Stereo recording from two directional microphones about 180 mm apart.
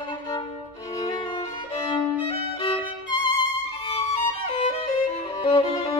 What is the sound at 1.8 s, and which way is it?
Violin, 30° left (ahead or behind).